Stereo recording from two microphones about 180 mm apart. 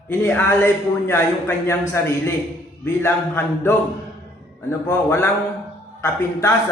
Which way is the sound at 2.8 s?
10° left (ahead or behind).